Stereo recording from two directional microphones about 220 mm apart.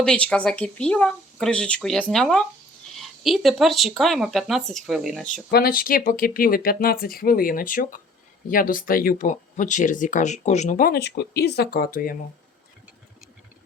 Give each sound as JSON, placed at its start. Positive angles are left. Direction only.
{"t": 0.0, "sound": "speech", "side_deg": 5}
{"t": 5.5, "sound": "speech", "side_deg": 45}